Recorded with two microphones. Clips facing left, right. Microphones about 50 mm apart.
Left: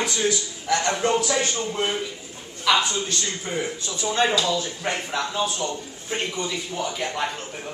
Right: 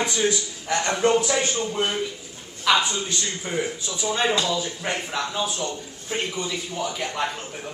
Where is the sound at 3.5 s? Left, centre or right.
Centre.